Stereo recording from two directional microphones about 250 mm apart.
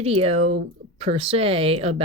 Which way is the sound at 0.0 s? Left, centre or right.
Right.